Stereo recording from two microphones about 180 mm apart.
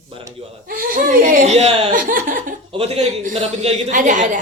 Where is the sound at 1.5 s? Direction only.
35° right (ahead or behind).